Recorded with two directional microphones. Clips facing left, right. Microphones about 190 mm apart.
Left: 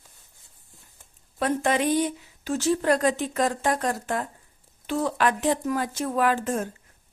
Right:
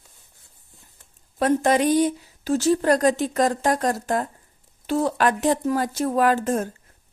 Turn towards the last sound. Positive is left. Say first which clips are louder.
# right 4 dB
turn(degrees=-40)  # may be behind; listen again after turning